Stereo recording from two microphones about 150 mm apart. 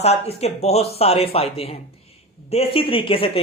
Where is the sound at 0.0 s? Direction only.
45° left (ahead or behind).